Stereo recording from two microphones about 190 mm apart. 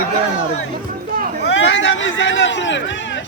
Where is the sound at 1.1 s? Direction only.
45° right (ahead or behind).